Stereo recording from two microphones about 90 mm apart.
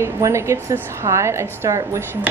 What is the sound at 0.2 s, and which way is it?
A woman's voice, 30° right (ahead or behind).